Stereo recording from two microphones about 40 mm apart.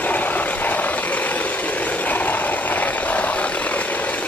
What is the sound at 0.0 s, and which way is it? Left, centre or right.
Vehicle, left.